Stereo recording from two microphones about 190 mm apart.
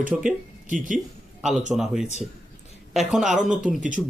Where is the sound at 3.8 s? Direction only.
40° right (ahead or behind).